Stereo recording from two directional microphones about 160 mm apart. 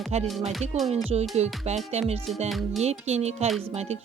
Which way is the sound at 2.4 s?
Centre (ahead or behind).